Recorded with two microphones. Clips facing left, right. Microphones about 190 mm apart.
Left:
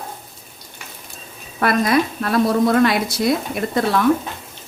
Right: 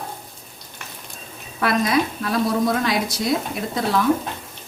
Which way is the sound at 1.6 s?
55° left (ahead or behind).